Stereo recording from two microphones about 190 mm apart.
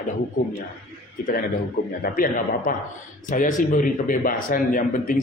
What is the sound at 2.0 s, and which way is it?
A man's voice, 50° left (ahead or behind).